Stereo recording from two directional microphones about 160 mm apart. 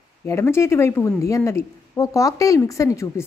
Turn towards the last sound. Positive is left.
turn(degrees=20)  # may be behind; listen again after turning